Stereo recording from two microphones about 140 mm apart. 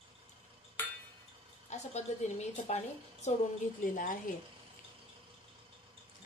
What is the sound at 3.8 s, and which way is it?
Speech, 70° left (ahead or behind).